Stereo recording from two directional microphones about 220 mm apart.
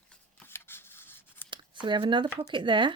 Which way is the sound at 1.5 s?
20° right (ahead or behind).